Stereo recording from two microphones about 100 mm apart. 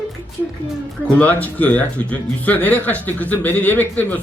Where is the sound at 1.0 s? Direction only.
15° left (ahead or behind).